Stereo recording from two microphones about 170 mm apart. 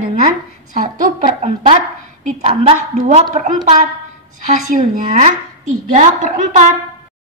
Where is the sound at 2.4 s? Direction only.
40° right (ahead or behind).